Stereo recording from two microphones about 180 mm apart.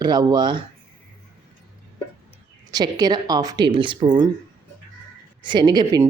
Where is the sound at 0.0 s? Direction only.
25° right (ahead or behind).